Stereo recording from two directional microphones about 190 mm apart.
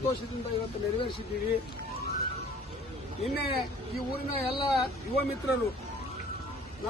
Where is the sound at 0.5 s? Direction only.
30° left (ahead or behind).